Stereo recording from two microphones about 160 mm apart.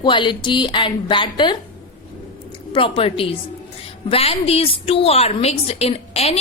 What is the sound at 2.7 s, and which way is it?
A woman's voice, 35° left (ahead or behind).